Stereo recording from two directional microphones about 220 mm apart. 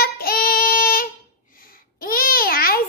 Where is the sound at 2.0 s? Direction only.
40° left (ahead or behind).